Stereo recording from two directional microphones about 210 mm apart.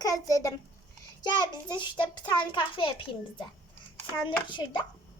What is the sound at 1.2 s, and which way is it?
A child's voice, 20° left (ahead or behind).